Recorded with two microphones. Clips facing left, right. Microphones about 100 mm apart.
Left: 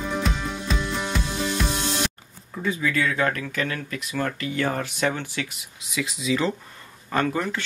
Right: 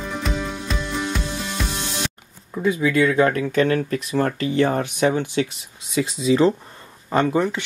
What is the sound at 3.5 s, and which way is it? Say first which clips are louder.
Speech: right 10 dB; 35° right (ahead or behind).